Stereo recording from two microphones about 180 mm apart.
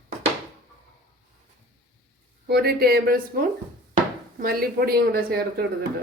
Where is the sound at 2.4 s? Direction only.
60° right (ahead or behind).